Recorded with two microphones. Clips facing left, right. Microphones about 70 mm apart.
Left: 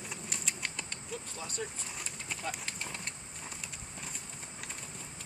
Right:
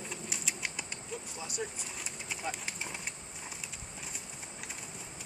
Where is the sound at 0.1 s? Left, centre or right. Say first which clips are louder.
Right 1 dB; centre.